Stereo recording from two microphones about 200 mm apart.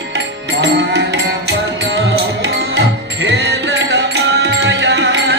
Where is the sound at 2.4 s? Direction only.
60° right (ahead or behind).